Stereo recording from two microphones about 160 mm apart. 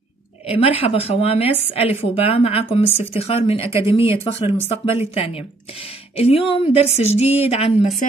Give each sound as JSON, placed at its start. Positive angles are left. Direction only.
{"t": 0.5, "sound": "a woman's voice", "side_deg": 40}